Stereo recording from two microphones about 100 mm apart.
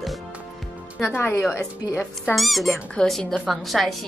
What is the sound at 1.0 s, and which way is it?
Speech, 25° left (ahead or behind).